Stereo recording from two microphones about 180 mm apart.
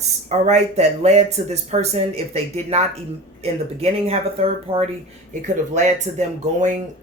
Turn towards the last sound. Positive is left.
turn(degrees=-40)  # may be behind; listen again after turning